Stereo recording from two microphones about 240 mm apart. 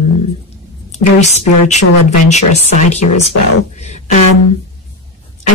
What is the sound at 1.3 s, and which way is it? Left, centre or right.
Speech, left.